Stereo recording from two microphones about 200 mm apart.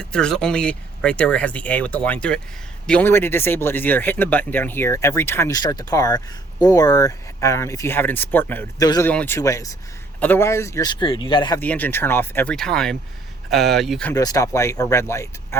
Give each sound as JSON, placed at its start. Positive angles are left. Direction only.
{"t": 0.0, "sound": "speech", "side_deg": 5}
{"t": 11.6, "sound": "speech", "side_deg": 10}
{"t": 14.1, "sound": "speech", "side_deg": 20}